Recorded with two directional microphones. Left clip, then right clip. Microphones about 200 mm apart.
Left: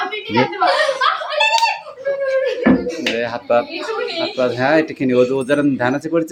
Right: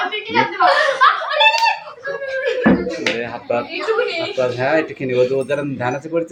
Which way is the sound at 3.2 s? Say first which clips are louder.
Left 4 dB; 20° left (ahead or behind).